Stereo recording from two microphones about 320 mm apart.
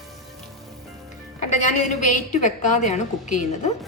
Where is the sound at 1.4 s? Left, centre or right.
Left.